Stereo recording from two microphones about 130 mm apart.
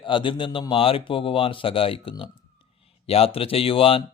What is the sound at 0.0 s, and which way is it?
Speech, 40° left (ahead or behind).